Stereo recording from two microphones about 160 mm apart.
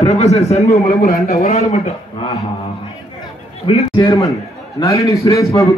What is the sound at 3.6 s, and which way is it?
Speech, 35° left (ahead or behind).